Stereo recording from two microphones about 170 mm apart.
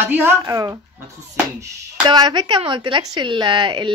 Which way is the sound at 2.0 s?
25° right (ahead or behind).